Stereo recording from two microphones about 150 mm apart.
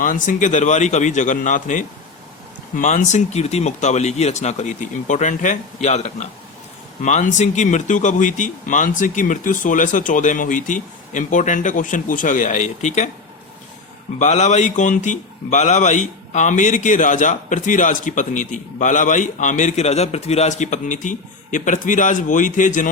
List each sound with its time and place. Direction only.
0.0 s speech: 60° left (ahead or behind)
14.2 s speech: 50° left (ahead or behind)